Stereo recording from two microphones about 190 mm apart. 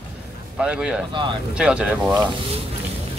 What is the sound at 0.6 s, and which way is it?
Speech, 5° right (ahead or behind).